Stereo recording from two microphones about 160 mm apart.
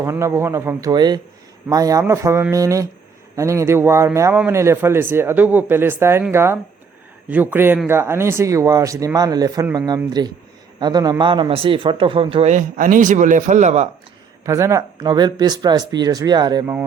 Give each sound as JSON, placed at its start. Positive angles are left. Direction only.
{"t": 0.0, "sound": "a man's voice", "side_deg": -20}
{"t": 12.5, "sound": "speech", "side_deg": -55}
{"t": 14.4, "sound": "speech", "side_deg": -20}